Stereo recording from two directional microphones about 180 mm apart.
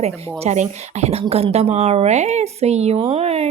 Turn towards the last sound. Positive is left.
turn(degrees=-35)  # may be behind; listen again after turning